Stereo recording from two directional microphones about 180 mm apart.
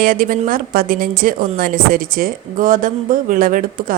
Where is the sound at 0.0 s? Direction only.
50° right (ahead or behind).